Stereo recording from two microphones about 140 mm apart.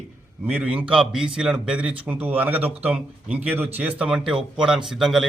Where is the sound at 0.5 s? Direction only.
10° right (ahead or behind).